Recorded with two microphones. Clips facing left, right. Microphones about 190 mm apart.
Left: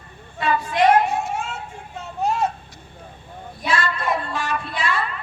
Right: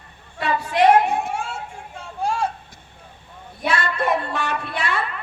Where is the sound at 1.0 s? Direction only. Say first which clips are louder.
Right 1 dB; 55° right (ahead or behind).